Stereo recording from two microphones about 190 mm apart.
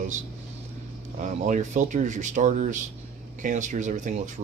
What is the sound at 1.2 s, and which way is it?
Speech, 40° right (ahead or behind).